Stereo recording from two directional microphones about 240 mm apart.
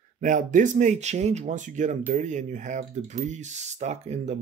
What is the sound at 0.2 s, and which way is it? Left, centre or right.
Speech, right.